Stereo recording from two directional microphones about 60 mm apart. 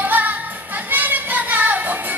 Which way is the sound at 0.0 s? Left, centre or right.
Right.